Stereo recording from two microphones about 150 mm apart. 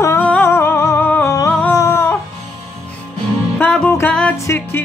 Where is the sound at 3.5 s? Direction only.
10° left (ahead or behind).